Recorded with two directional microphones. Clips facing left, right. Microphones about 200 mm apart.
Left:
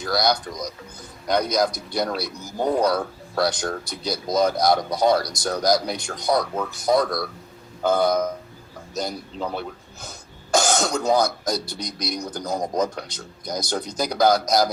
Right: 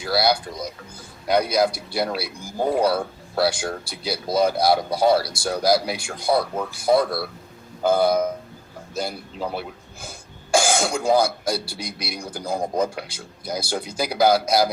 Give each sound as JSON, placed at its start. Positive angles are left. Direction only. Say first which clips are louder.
{"t": 0.0, "sound": "speech", "louder": "right 1 dB", "side_deg": -5}